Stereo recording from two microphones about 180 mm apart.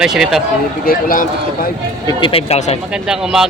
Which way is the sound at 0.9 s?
50° left (ahead or behind).